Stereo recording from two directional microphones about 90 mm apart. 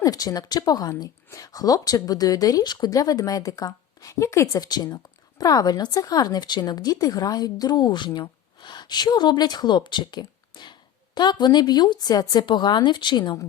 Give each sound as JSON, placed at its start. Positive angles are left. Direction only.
{"t": 0.0, "sound": "a woman's voice", "side_deg": 45}
{"t": 12.5, "sound": "speech", "side_deg": 55}